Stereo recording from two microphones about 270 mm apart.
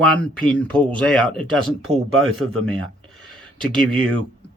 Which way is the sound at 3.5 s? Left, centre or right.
Centre.